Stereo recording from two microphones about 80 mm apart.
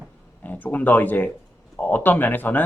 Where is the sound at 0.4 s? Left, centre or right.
Left.